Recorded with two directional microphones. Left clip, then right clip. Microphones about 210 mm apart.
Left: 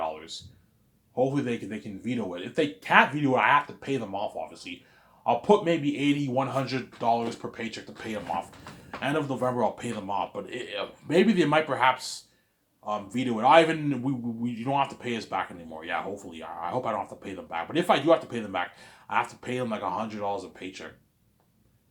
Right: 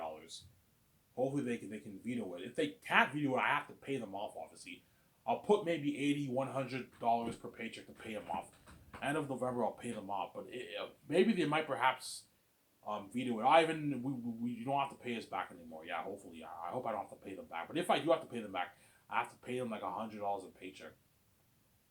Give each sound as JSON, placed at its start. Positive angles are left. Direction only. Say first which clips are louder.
{"t": 1.1, "sound": "speech", "louder": "left 10 dB", "side_deg": 25}